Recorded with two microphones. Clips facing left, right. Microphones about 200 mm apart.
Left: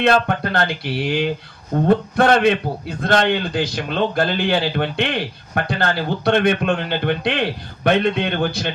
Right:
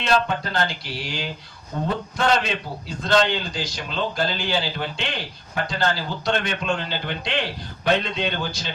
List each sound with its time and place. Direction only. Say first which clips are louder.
0.0 s a man's voice: left 5 dB; 60° left (ahead or behind)